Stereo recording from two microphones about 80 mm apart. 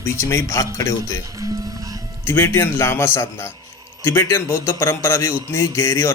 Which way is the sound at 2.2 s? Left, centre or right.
Left.